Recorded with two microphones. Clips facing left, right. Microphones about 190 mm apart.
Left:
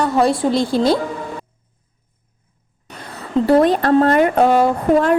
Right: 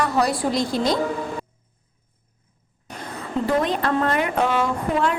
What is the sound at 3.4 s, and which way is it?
A woman's voice, 35° left (ahead or behind).